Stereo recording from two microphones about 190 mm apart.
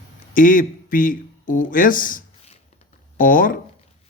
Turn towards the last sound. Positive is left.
turn(degrees=45)  # may be behind; listen again after turning